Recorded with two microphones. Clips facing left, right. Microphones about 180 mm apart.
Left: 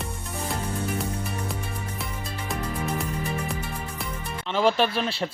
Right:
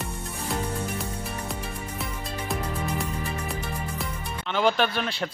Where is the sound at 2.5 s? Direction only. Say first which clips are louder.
Right 1 dB; centre (ahead or behind).